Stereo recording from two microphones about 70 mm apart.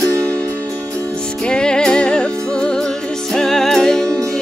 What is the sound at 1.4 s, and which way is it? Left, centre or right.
Music, centre.